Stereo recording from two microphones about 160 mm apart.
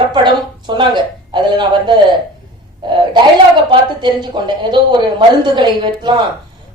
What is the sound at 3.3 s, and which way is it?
A woman's voice, 30° right (ahead or behind).